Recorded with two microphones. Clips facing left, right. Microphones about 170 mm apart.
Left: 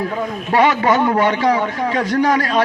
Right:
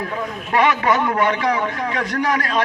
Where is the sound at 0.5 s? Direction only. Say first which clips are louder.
Left 3 dB; 30° left (ahead or behind).